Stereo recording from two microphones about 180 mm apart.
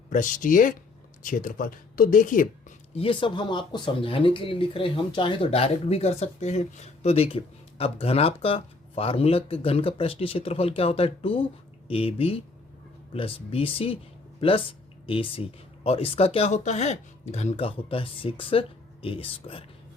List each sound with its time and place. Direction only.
0.1 s speech: 45° left (ahead or behind)
2.9 s speech: 30° left (ahead or behind)